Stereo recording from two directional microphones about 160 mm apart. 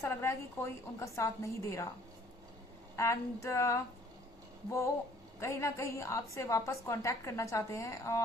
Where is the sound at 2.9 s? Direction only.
20° left (ahead or behind).